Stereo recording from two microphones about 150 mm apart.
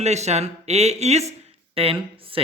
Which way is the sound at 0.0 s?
50° right (ahead or behind).